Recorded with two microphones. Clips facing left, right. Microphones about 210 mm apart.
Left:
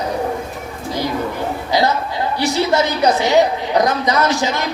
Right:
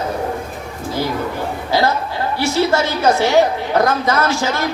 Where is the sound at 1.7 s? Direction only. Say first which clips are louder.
Even; 15° left (ahead or behind).